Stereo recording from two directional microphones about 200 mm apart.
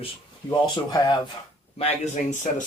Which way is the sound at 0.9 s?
20° left (ahead or behind).